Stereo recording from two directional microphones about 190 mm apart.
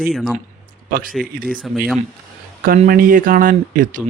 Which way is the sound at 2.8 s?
50° right (ahead or behind).